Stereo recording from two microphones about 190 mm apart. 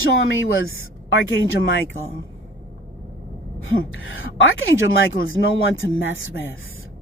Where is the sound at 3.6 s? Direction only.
90° left.